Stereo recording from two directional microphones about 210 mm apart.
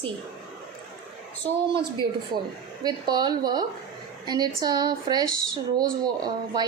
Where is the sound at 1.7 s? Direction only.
20° right (ahead or behind).